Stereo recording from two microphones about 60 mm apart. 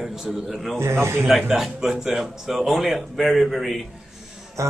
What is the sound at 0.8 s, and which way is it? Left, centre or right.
Speech, right.